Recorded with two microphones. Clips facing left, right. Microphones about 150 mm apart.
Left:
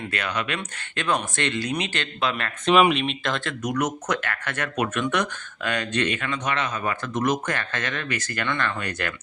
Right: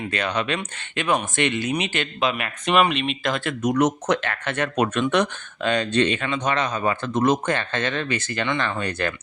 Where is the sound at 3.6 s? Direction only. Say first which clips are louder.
Right 8 dB; 30° right (ahead or behind).